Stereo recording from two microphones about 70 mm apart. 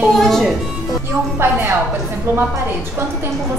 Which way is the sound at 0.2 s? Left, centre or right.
Centre.